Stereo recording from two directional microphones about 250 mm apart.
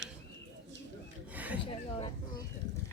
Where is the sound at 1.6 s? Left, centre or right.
Centre.